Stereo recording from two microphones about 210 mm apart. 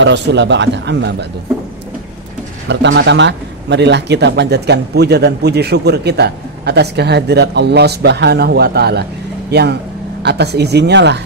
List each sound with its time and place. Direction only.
0.0 s a man's voice: 55° right (ahead or behind)
2.7 s speech: 55° right (ahead or behind)